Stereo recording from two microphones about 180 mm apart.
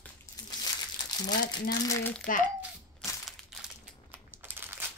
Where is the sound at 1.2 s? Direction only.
25° left (ahead or behind).